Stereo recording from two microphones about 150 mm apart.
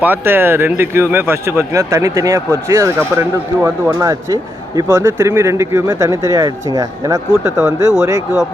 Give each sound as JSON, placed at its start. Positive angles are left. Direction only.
{"t": 0.0, "sound": "speech", "side_deg": -15}